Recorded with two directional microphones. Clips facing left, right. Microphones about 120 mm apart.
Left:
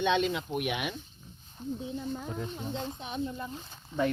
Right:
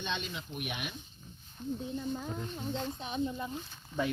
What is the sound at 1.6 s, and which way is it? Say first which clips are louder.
Speech: left 1 dB; 35° left (ahead or behind).